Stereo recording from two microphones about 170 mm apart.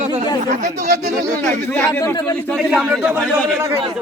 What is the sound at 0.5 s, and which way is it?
Speech, 45° right (ahead or behind).